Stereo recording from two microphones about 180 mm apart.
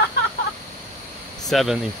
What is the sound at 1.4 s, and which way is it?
Speech, centre (ahead or behind).